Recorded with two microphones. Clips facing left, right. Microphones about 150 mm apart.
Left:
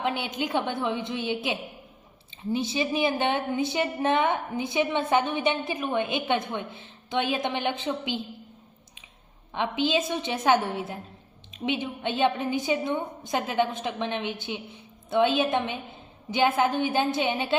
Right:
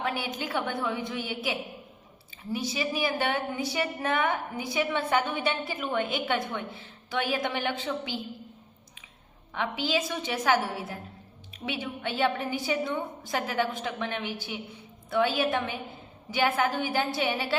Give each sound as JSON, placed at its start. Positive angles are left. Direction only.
{"t": 0.0, "sound": "a woman's voice", "side_deg": 20}
{"t": 9.5, "sound": "a woman's voice", "side_deg": 20}